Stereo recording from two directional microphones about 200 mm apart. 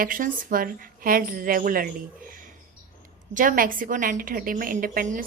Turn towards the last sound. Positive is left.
turn(degrees=-45)  # may be behind; listen again after turning